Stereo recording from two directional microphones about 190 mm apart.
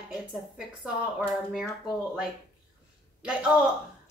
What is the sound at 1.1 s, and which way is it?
Speech, centre (ahead or behind).